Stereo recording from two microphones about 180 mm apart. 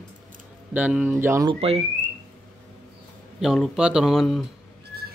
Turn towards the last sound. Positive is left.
turn(degrees=0)  # may be behind; listen again after turning